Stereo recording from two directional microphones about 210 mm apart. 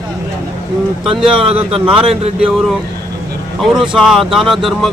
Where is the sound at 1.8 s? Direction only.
25° right (ahead or behind).